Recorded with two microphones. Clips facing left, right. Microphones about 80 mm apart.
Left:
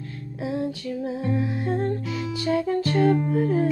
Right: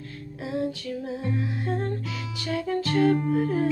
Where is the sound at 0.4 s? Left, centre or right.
Left.